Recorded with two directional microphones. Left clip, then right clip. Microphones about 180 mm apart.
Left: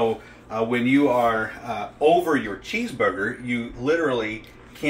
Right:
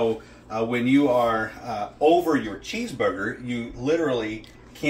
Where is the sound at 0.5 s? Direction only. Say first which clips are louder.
Left 1 dB; 10° left (ahead or behind).